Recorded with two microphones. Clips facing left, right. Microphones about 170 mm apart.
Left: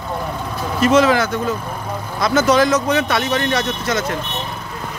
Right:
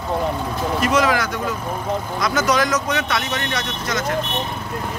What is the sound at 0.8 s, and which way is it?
Speech, 25° left (ahead or behind).